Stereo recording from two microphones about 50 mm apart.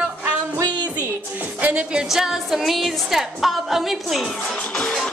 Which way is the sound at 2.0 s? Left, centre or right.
Centre.